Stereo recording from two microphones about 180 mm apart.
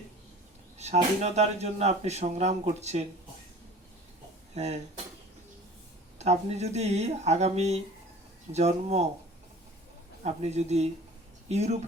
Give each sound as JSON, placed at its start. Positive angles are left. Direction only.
{"t": 1.2, "sound": "speech", "side_deg": -40}
{"t": 4.5, "sound": "speech", "side_deg": -40}
{"t": 6.1, "sound": "speech", "side_deg": -35}
{"t": 10.2, "sound": "speech", "side_deg": -35}